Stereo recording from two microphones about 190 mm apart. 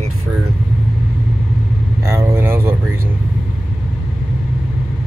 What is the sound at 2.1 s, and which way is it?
Speech, 15° right (ahead or behind).